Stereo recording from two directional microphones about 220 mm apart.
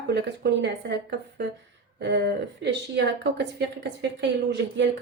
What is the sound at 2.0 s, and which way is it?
Speech, 50° right (ahead or behind).